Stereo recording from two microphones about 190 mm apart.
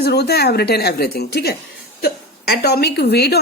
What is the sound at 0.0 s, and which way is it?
A woman's voice, 60° left (ahead or behind).